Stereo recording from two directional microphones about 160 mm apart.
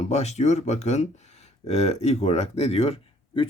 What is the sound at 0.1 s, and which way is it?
Speech, 45° left (ahead or behind).